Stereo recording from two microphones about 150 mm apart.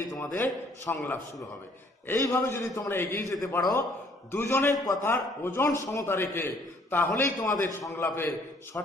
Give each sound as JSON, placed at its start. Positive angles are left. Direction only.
{"t": 0.1, "sound": "a man's voice", "side_deg": 15}